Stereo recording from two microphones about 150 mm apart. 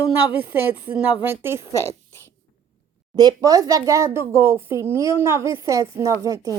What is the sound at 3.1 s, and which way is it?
Speech, 25° right (ahead or behind).